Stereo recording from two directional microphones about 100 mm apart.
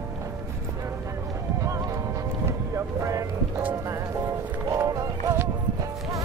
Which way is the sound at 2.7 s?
30° right (ahead or behind).